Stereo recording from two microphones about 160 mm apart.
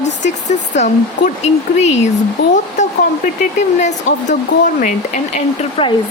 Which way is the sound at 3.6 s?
45° left (ahead or behind).